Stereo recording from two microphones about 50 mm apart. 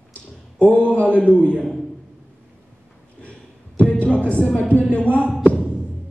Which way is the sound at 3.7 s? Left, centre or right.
Left.